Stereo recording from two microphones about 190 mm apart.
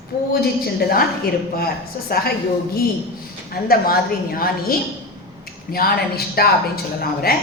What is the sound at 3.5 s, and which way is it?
A woman's voice, 50° left (ahead or behind).